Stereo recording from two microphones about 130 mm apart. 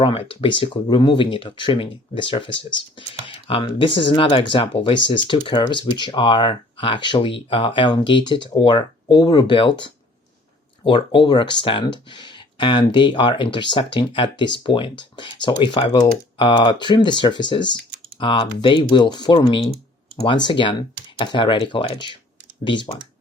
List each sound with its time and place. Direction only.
0.3 s speech: 40° left (ahead or behind)